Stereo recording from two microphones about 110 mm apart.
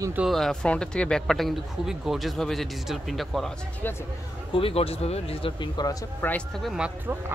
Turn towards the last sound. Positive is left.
turn(degrees=-10)  # may be behind; listen again after turning